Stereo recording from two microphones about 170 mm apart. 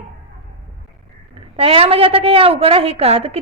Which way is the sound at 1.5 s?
35° right (ahead or behind).